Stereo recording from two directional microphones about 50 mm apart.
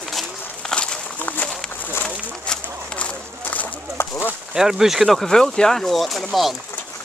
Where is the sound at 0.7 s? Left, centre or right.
Centre.